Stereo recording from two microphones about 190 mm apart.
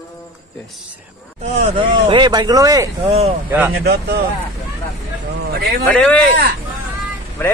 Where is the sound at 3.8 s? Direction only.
60° right (ahead or behind).